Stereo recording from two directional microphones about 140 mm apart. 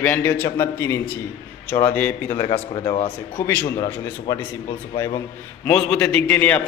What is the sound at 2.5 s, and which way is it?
Speech, 45° left (ahead or behind).